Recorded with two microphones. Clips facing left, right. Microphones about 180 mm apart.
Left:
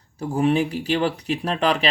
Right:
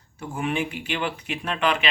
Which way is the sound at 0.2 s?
35° left (ahead or behind).